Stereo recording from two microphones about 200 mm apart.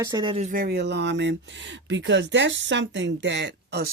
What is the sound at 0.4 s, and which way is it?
Speech, 45° right (ahead or behind).